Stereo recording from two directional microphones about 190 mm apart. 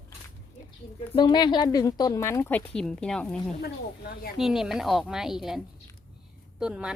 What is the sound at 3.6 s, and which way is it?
Speech, 55° left (ahead or behind).